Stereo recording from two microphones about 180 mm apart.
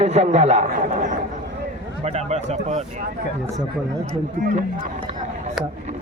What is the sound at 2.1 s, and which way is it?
Speech, 40° right (ahead or behind).